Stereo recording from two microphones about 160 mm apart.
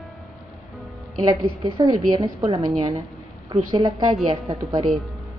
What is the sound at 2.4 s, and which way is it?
A woman's voice, 25° right (ahead or behind).